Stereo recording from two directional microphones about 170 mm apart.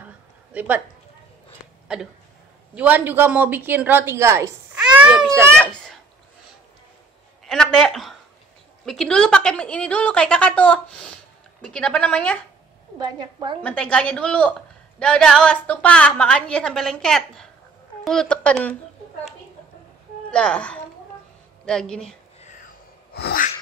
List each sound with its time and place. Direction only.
0.5 s a woman's voice: 10° right (ahead or behind)
1.9 s speech: 5° right (ahead or behind)
5.0 s a sound: 5° right (ahead or behind)
7.4 s a woman's voice: 5° left (ahead or behind)
13.0 s a woman's voice: 25° right (ahead or behind)
13.6 s a woman's voice: 10° left (ahead or behind)
20.2 s a woman's voice: 5° left (ahead or behind)
23.1 s a sound: 70° left (ahead or behind)